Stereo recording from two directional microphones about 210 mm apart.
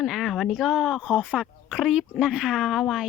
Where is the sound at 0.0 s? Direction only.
Centre (ahead or behind).